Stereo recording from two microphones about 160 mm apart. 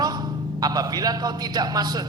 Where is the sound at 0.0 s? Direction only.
25° right (ahead or behind).